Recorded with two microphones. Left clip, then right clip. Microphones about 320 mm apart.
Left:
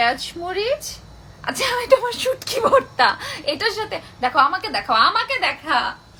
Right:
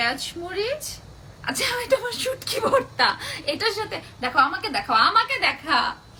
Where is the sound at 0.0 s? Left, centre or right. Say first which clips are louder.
Left 5 dB; left.